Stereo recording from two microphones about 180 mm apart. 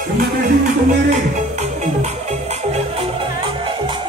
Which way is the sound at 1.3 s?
40° right (ahead or behind).